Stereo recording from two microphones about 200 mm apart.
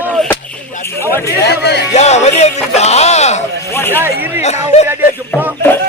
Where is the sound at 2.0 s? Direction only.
35° left (ahead or behind).